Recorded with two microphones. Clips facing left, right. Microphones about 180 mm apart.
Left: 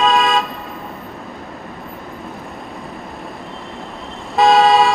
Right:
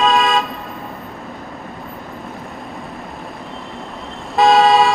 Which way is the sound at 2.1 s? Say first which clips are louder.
Even; centre (ahead or behind).